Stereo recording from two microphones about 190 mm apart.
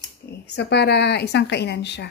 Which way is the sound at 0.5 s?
60° left (ahead or behind).